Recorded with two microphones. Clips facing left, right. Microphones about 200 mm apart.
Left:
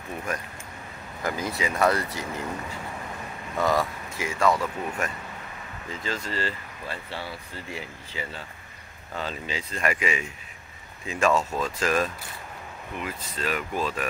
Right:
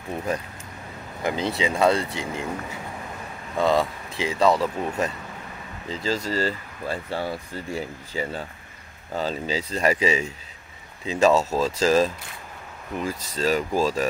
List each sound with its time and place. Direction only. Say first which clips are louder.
1.2 s speech: right 4 dB; 25° right (ahead or behind)
3.5 s speech: right 3 dB; 20° right (ahead or behind)